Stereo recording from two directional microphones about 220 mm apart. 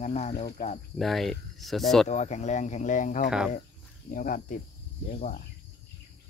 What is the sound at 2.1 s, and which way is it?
Speech, 30° left (ahead or behind).